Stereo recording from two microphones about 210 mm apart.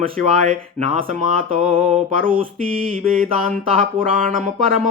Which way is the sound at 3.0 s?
40° right (ahead or behind).